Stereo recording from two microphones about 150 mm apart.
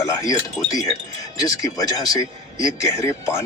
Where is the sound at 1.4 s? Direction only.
25° left (ahead or behind).